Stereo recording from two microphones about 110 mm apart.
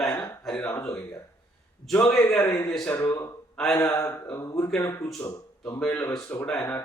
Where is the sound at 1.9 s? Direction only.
10° left (ahead or behind).